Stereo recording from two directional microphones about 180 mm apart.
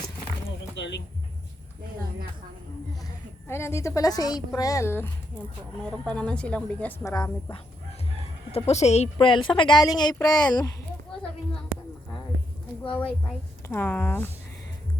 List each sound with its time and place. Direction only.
0.8 s speech: 75° left (ahead or behind)
3.5 s a woman's voice: 15° left (ahead or behind)
7.1 s a woman's voice: 20° left (ahead or behind)
8.5 s a woman's voice: 35° left (ahead or behind)
9.1 s a woman's voice: 25° left (ahead or behind)
12.9 s a woman's voice: 5° left (ahead or behind)